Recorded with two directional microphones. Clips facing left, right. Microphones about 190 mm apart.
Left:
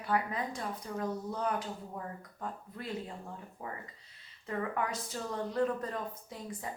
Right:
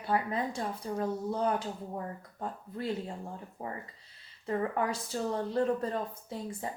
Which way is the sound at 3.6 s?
35° right (ahead or behind).